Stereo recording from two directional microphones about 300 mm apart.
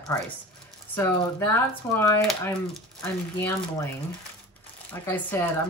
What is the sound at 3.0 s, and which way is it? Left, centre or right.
Speech, centre.